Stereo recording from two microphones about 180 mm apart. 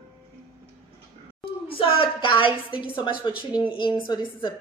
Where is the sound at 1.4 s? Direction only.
30° left (ahead or behind).